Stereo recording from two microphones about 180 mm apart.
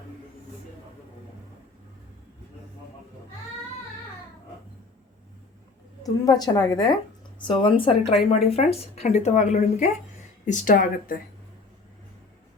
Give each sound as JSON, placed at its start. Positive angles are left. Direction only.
{"t": 6.0, "sound": "a woman's voice", "side_deg": 20}